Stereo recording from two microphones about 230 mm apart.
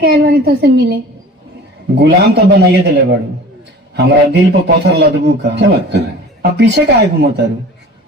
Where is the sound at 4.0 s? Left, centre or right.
Right.